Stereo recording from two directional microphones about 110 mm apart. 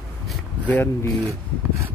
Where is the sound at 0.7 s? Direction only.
20° left (ahead or behind).